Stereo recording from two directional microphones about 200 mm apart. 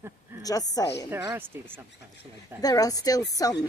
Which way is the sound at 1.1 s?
15° right (ahead or behind).